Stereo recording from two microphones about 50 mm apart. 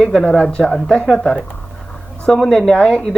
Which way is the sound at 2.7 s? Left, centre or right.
Centre.